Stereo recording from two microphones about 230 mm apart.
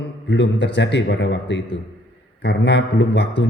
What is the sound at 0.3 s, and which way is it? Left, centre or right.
A man's voice, left.